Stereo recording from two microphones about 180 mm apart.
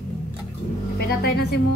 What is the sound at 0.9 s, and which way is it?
Speech, 65° left (ahead or behind).